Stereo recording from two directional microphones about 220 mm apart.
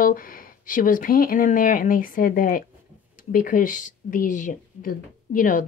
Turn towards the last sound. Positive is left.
turn(degrees=40)  # may be behind; listen again after turning